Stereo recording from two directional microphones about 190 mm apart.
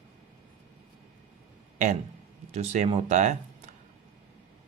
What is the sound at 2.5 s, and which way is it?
Speech, 35° right (ahead or behind).